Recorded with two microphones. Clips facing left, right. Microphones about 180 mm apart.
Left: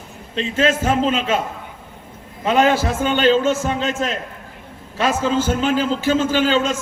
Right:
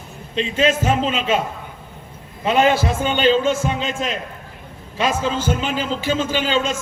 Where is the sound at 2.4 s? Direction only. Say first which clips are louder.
Even; 10° right (ahead or behind).